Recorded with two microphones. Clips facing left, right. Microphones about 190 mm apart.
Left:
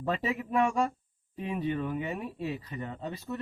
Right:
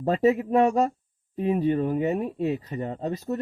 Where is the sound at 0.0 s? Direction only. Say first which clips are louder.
Right 10 dB; 40° right (ahead or behind).